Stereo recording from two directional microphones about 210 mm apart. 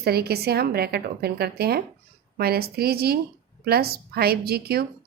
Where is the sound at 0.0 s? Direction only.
50° right (ahead or behind).